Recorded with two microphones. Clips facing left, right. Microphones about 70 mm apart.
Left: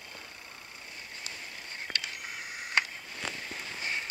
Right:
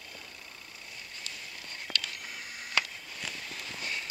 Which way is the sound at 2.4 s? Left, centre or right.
Left.